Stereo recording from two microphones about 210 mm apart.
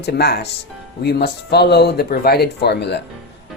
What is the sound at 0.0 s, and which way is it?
Speech, 50° left (ahead or behind).